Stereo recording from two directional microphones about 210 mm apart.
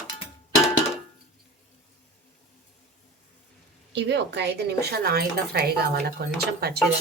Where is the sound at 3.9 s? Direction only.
55° right (ahead or behind).